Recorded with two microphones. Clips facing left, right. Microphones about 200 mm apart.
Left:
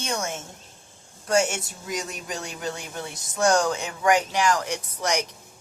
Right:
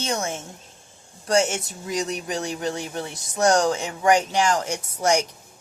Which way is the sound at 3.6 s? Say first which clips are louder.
Right 3 dB; 25° right (ahead or behind).